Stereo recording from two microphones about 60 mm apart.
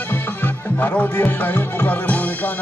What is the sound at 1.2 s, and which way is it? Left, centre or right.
Music, left.